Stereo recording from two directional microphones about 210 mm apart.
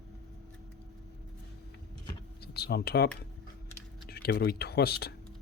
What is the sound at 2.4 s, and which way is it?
Speech, 50° left (ahead or behind).